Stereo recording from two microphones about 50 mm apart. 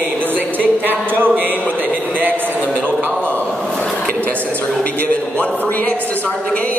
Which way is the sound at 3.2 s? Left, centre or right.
Left.